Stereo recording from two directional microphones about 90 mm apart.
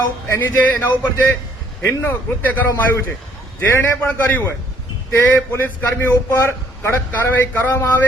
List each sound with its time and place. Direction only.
0.3 s a man's voice: 25° left (ahead or behind)